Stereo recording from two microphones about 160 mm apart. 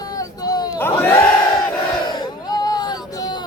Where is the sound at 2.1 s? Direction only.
25° left (ahead or behind).